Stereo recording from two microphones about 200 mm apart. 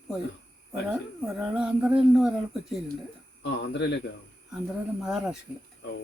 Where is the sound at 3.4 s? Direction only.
60° left (ahead or behind).